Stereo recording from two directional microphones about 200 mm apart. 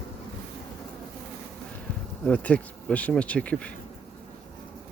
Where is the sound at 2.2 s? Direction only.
5° left (ahead or behind).